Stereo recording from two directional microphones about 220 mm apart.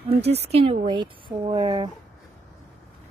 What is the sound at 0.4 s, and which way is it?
Speech, 25° right (ahead or behind).